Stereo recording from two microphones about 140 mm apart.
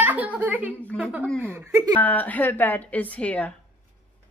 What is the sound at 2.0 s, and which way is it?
A woman's voice, 10° left (ahead or behind).